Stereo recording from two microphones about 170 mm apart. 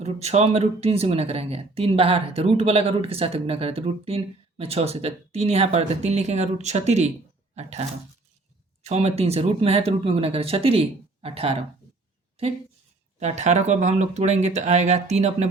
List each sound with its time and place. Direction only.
0.0 s speech: 40° right (ahead or behind)
13.1 s speech: 40° right (ahead or behind)